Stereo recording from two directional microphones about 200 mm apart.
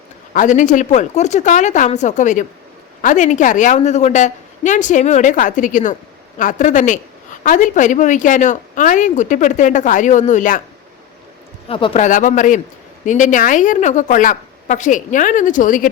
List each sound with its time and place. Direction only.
0.3 s speech: 40° left (ahead or behind)
11.7 s speech: 30° left (ahead or behind)